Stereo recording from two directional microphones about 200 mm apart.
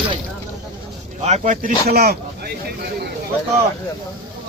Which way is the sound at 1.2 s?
35° right (ahead or behind).